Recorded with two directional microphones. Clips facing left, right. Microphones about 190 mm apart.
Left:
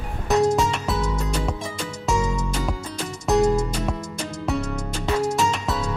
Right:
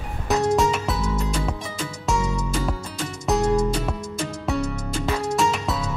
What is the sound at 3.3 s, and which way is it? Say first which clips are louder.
Music: left 3 dB; centre (ahead or behind).